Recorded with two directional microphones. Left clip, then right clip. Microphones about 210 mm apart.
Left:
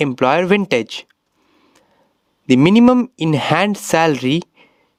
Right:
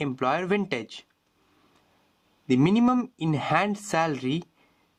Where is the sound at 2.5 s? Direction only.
45° left (ahead or behind).